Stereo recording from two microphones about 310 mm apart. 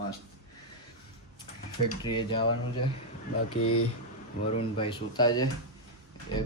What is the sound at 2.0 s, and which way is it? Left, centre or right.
Speech, centre.